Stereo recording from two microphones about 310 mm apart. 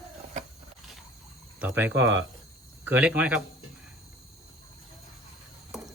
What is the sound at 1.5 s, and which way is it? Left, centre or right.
Speech, centre.